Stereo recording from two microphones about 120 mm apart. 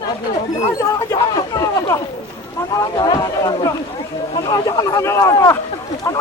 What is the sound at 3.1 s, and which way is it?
Speech, 35° left (ahead or behind).